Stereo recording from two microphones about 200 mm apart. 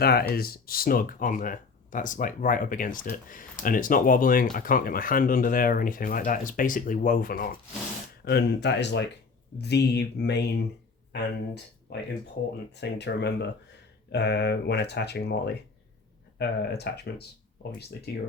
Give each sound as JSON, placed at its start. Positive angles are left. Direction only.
{"t": 0.0, "sound": "speech", "side_deg": 50}
{"t": 8.2, "sound": "speech", "side_deg": 55}